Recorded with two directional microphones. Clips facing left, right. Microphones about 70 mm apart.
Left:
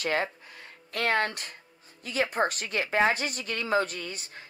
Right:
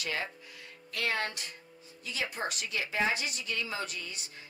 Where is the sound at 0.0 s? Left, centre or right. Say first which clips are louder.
Left 7 dB; left.